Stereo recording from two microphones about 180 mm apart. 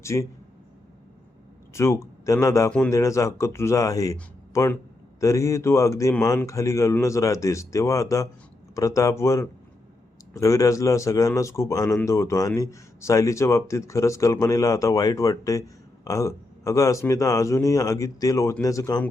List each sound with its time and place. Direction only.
0.0 s speech: 15° left (ahead or behind)
1.7 s speech: 15° left (ahead or behind)